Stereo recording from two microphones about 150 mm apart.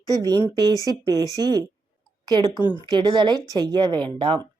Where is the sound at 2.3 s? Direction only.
30° right (ahead or behind).